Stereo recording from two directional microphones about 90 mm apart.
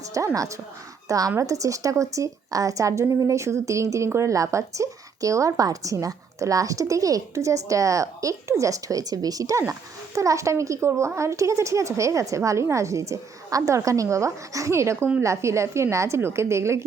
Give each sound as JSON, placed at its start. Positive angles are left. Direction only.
{"t": 0.3, "sound": "a woman's voice", "side_deg": -35}